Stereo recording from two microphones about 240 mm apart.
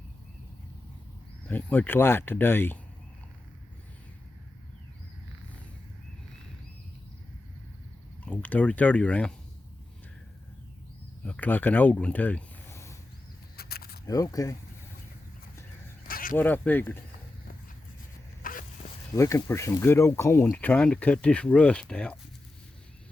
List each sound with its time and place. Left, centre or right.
1.5 s speech: centre
8.2 s speech: centre
11.2 s speech: centre
13.6 s a sound: left
14.1 s speech: centre
16.0 s a sound: left
16.4 s speech: centre
18.4 s a sound: left
19.1 s speech: centre